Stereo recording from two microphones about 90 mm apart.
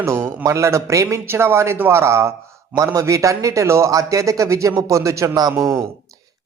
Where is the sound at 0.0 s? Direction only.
30° right (ahead or behind).